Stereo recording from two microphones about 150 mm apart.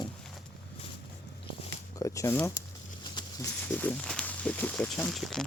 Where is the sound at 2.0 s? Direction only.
20° left (ahead or behind).